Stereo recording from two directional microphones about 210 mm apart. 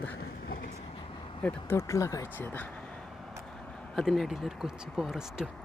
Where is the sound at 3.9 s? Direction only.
Centre (ahead or behind).